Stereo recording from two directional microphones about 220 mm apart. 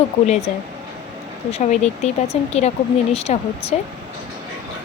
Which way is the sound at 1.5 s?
30° left (ahead or behind).